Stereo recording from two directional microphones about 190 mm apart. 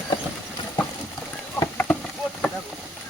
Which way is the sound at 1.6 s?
10° left (ahead or behind).